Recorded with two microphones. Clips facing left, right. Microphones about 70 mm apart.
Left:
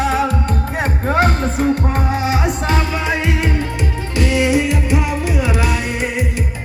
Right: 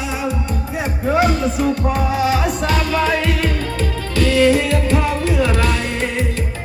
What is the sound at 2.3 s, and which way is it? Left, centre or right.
Music, left.